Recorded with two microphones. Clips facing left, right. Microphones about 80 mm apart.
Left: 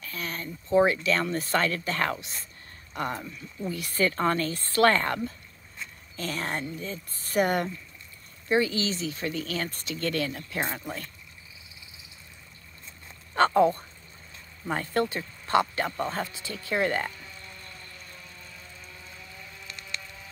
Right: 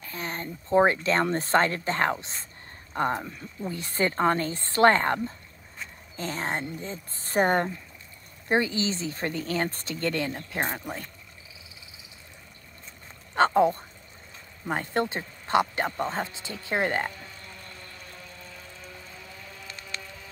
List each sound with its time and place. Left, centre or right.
0.0 s speech: right
13.5 s speech: centre